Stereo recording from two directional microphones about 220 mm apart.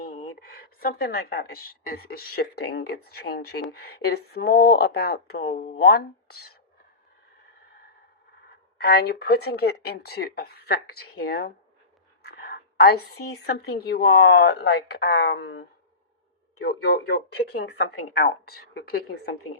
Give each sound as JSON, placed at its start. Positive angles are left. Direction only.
{"t": 0.0, "sound": "a woman's voice", "side_deg": 40}
{"t": 8.8, "sound": "a woman's voice", "side_deg": 45}